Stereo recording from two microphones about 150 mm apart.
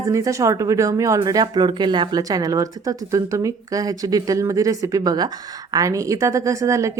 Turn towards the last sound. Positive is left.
turn(degrees=-20)  # may be behind; listen again after turning